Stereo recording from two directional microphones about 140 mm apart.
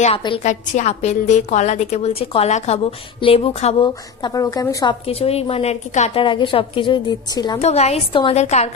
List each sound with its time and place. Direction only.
0.4 s a woman's voice: 55° left (ahead or behind)
3.8 s a woman's voice: 30° left (ahead or behind)
5.0 s a woman's voice: 45° left (ahead or behind)
6.2 s a woman's voice: 35° left (ahead or behind)
7.5 s a woman's voice: 50° left (ahead or behind)